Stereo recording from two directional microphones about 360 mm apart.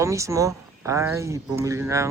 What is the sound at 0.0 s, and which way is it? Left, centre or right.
Speech, centre.